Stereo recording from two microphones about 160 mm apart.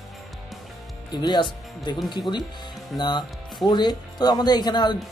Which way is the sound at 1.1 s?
30° left (ahead or behind).